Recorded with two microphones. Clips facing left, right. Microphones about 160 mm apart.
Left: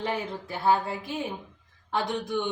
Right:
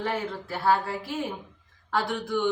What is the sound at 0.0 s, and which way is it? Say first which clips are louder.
A man's voice: right 1 dB; 20° left (ahead or behind).